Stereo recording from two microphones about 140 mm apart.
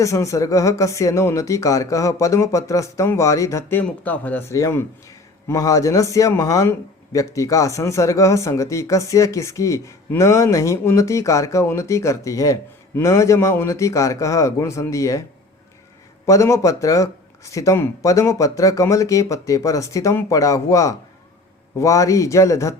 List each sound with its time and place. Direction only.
0.0 s speech: 20° left (ahead or behind)
16.2 s speech: 20° left (ahead or behind)